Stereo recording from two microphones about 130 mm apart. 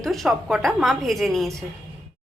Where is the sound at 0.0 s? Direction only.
Centre (ahead or behind).